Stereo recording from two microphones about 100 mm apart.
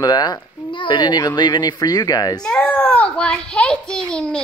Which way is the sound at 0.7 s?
50° left (ahead or behind).